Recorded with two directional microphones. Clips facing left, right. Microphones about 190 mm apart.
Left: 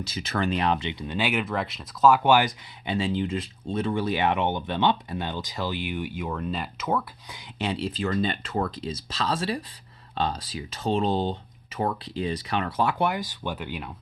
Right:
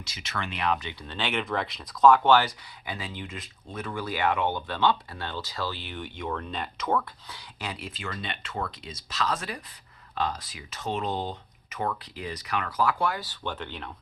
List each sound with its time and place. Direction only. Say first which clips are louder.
0.0 s speech: left 8 dB; 35° left (ahead or behind); by 7.0 s 5° left (ahead or behind)
7.3 s speech: left 7 dB; 15° left (ahead or behind)
7.7 s speech: left 10 dB; 35° left (ahead or behind); by 13.9 s 10° left (ahead or behind)